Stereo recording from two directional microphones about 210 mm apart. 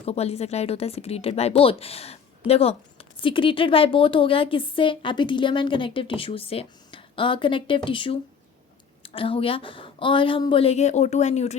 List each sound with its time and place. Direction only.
0.0 s a woman's voice: 30° left (ahead or behind)